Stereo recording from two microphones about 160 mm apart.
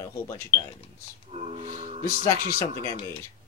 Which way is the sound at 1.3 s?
40° right (ahead or behind).